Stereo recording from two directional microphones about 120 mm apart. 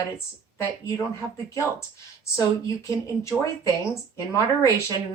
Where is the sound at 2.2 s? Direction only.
25° left (ahead or behind).